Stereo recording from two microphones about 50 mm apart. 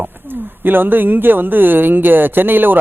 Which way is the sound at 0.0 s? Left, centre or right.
Right.